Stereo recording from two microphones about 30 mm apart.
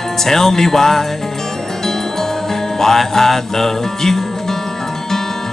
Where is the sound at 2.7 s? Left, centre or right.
Centre.